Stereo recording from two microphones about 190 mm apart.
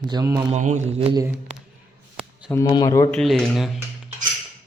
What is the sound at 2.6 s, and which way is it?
Speech, 20° left (ahead or behind).